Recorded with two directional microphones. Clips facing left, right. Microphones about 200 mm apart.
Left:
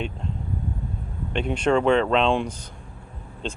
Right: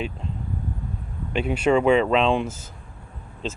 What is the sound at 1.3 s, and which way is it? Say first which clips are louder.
Speech: right 1 dB; 5° right (ahead or behind).